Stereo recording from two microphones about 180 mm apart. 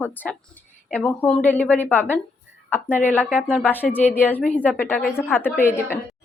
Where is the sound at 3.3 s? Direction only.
10° right (ahead or behind).